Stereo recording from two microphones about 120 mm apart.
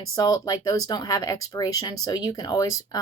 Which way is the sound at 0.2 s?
30° left (ahead or behind).